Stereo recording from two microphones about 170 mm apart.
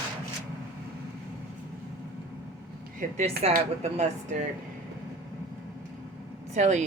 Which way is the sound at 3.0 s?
45° right (ahead or behind).